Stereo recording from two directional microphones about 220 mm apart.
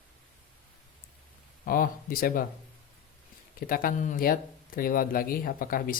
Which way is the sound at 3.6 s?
40° left (ahead or behind).